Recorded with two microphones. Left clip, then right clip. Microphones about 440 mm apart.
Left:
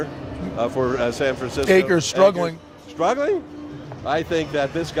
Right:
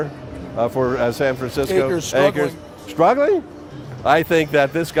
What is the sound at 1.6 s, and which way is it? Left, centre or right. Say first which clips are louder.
Speech: left 4 dB; left.